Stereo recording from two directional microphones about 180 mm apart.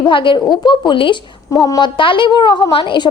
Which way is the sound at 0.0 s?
30° left (ahead or behind).